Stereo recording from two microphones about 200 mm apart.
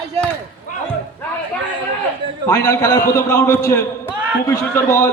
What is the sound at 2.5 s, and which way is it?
A man's voice, 15° left (ahead or behind).